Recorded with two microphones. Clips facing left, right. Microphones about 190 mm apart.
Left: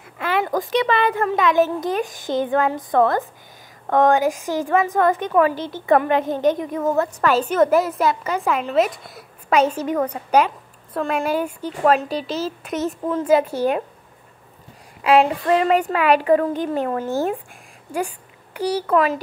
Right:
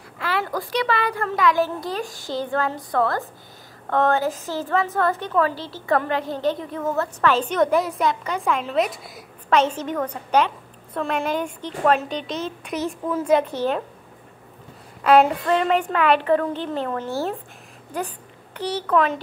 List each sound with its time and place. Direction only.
0.2 s a child's voice: 20° left (ahead or behind)
15.0 s a sound: centre (ahead or behind)
15.4 s a woman's voice: 10° left (ahead or behind)